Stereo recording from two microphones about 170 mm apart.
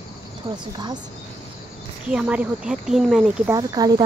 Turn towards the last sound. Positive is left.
turn(degrees=-25)  # may be behind; listen again after turning